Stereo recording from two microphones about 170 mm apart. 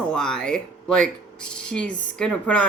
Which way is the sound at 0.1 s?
5° left (ahead or behind).